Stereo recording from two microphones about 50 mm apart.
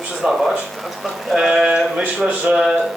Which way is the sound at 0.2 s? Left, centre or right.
Centre.